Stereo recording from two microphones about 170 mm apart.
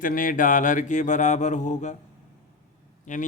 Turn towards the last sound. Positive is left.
turn(degrees=45)  # may be behind; listen again after turning